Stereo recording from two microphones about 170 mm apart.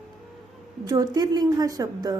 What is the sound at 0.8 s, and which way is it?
A woman's voice, 20° right (ahead or behind).